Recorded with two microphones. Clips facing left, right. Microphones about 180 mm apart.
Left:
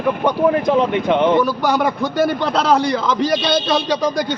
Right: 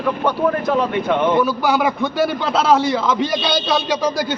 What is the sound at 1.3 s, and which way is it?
A man's voice, centre (ahead or behind).